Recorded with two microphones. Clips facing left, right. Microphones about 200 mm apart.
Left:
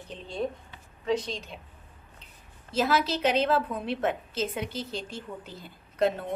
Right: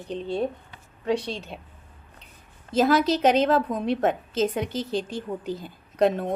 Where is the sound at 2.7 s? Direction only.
40° right (ahead or behind).